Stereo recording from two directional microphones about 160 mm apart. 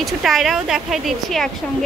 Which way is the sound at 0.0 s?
Centre (ahead or behind).